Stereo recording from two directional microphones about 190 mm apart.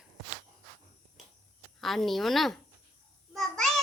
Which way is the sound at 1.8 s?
Centre (ahead or behind).